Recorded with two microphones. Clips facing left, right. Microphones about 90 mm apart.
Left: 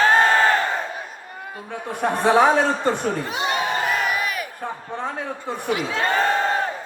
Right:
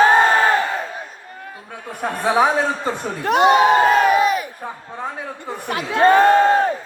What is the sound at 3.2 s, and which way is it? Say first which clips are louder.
Speech: right 11 dB; 65° right (ahead or behind).